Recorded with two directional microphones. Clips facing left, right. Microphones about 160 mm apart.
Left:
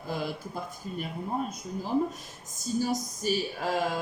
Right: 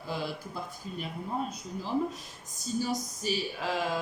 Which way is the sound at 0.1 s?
50° left (ahead or behind).